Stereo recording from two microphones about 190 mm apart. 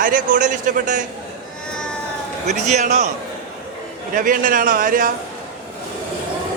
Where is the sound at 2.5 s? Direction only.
35° right (ahead or behind).